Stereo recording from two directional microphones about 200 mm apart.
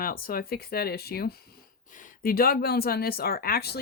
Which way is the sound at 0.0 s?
45° left (ahead or behind).